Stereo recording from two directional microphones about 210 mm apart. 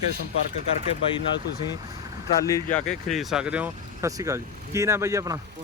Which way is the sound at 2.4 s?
10° left (ahead or behind).